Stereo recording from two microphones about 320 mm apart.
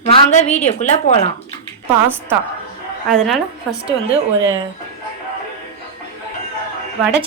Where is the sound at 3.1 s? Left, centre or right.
Centre.